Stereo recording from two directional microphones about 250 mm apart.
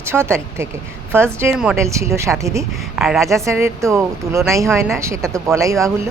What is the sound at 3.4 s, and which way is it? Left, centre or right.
A woman's voice, centre.